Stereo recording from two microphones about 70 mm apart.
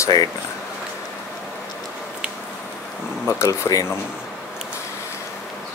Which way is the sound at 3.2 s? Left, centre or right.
Left.